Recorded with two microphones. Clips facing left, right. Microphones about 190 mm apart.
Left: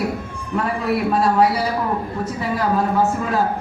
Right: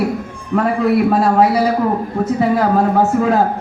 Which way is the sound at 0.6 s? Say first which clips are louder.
Right 7 dB; 50° right (ahead or behind).